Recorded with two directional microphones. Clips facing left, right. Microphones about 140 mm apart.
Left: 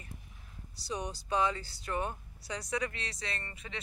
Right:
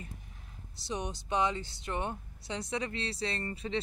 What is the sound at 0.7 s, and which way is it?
Speech, 20° right (ahead or behind).